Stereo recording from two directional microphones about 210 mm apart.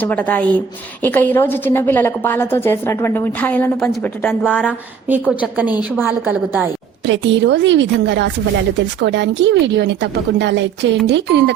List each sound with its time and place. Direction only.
0.0 s a woman's voice: 10° left (ahead or behind)
5.0 s a woman's voice: 10° right (ahead or behind)
7.0 s a woman's voice: 60° right (ahead or behind)